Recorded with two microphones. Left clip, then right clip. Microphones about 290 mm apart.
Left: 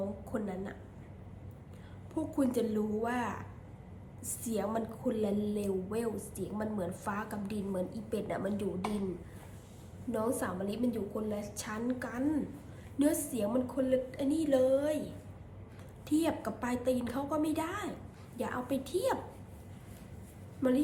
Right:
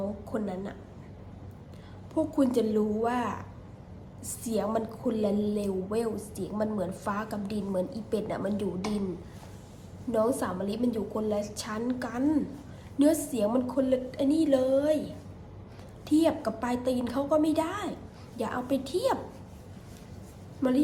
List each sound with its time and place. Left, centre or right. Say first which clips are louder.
0.3 s a woman's voice: right 4 dB; centre
2.1 s a woman's voice: right 6 dB; centre
4.4 s a woman's voice: right 5 dB; centre
10.1 s a woman's voice: right 7 dB; centre
16.0 s a woman's voice: right 7 dB; centre
20.6 s a woman's voice: right 4 dB; centre